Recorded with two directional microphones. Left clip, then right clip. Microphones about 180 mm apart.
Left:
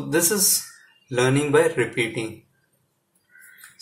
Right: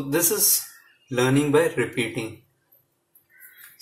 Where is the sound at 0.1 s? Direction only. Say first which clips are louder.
Left 2 dB; 10° left (ahead or behind).